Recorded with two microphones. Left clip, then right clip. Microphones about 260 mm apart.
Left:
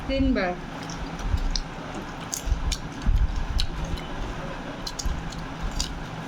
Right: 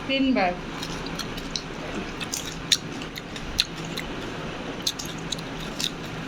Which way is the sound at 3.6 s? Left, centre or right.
Centre.